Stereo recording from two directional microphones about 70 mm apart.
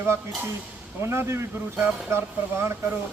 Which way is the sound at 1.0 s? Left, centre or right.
Right.